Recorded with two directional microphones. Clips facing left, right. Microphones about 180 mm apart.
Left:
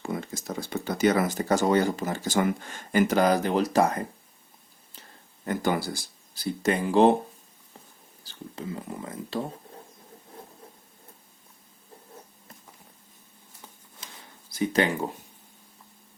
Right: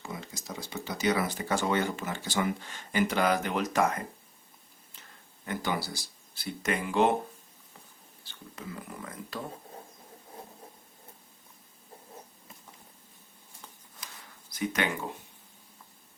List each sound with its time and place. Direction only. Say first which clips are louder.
0.0 s speech: left 8 dB; 55° left (ahead or behind); by 4.0 s 35° left (ahead or behind)
5.5 s speech: left 6 dB; 50° left (ahead or behind)
8.2 s speech: left 7 dB; 35° left (ahead or behind)
14.0 s a sound: left 1 dB; 25° left (ahead or behind)
14.5 s speech: left 7 dB; 30° left (ahead or behind)